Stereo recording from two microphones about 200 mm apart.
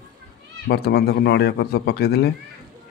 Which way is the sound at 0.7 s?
55° left (ahead or behind).